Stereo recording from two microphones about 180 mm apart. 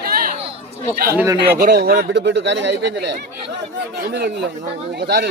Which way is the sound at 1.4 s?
65° right (ahead or behind).